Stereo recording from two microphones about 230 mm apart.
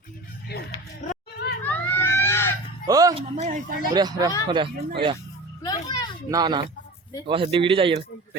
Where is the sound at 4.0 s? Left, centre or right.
Centre.